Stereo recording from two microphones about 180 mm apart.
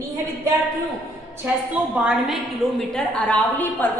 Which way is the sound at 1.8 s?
10° right (ahead or behind).